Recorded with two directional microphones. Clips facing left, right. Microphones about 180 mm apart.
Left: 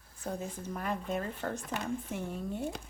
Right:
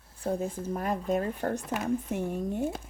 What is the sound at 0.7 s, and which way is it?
Speech, 40° right (ahead or behind).